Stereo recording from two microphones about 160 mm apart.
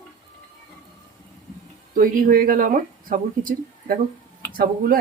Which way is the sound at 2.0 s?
60° right (ahead or behind).